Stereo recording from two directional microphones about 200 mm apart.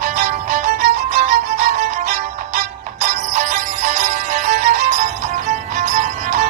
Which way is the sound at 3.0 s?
40° right (ahead or behind).